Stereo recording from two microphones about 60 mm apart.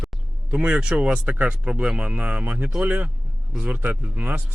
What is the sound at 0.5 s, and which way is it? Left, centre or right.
Speech, centre.